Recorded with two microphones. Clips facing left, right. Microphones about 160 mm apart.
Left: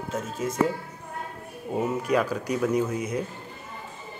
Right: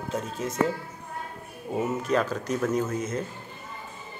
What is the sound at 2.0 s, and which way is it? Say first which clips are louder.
Speech: left 1 dB; 10° left (ahead or behind).